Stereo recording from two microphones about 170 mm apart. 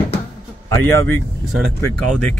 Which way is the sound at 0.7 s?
15° left (ahead or behind).